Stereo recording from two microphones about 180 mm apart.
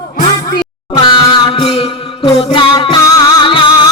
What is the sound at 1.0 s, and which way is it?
Music, 25° left (ahead or behind).